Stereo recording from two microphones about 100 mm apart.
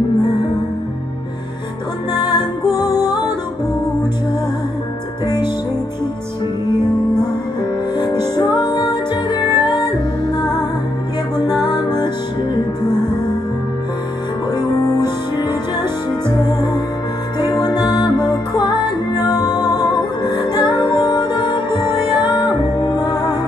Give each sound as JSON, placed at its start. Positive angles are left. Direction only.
{"t": 2.1, "sound": "music", "side_deg": 45}
{"t": 5.2, "sound": "music", "side_deg": 45}
{"t": 8.0, "sound": "music", "side_deg": 45}
{"t": 11.3, "sound": "music", "side_deg": 40}
{"t": 15.4, "sound": "music", "side_deg": 45}
{"t": 17.4, "sound": "music", "side_deg": 45}